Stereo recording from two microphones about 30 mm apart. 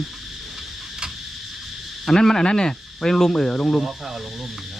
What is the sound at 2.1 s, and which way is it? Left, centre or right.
Speech, centre.